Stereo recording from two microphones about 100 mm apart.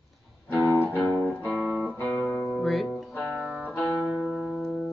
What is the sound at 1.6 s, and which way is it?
Music, 20° right (ahead or behind).